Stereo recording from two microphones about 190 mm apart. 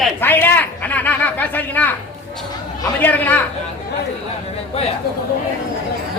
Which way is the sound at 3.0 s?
10° left (ahead or behind).